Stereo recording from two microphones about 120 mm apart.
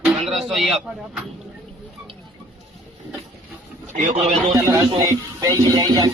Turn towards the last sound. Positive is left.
turn(degrees=-30)  # may be behind; listen again after turning